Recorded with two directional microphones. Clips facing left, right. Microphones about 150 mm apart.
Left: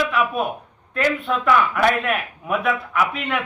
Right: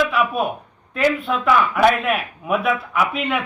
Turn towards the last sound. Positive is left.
turn(degrees=-5)  # may be behind; listen again after turning